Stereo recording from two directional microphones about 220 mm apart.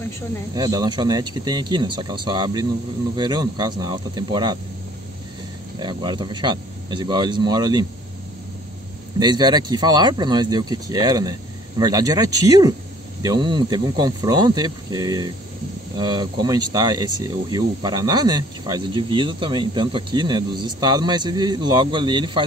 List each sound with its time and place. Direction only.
0.6 s speech: 20° right (ahead or behind)
5.8 s speech: 20° right (ahead or behind)
9.2 s speech: 20° right (ahead or behind)